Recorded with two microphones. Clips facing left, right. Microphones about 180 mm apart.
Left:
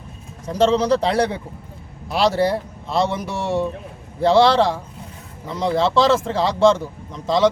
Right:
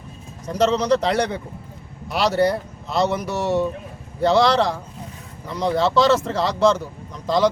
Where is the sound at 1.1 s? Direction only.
30° left (ahead or behind).